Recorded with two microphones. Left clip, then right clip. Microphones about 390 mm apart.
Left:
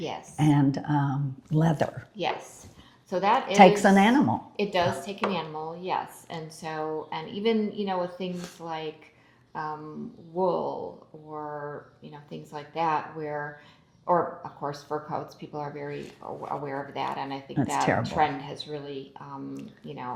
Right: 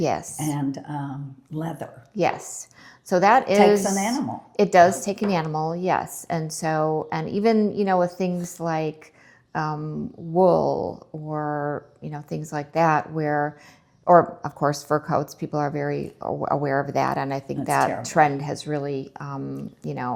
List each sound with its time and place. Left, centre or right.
0.0 s speech: right
0.3 s speech: left
2.1 s a woman's voice: right
3.5 s speech: left
4.5 s speech: right